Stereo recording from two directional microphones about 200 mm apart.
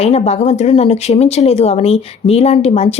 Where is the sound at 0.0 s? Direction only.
30° left (ahead or behind).